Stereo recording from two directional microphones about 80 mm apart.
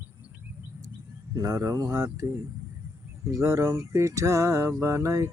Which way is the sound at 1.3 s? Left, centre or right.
Right.